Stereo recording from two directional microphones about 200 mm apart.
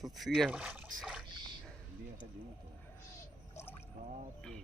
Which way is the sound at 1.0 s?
5° right (ahead or behind).